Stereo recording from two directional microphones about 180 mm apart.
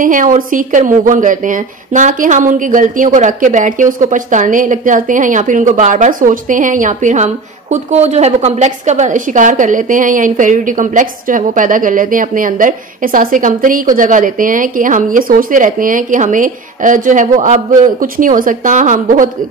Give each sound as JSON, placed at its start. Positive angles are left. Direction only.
{"t": 0.0, "sound": "a woman's voice", "side_deg": -45}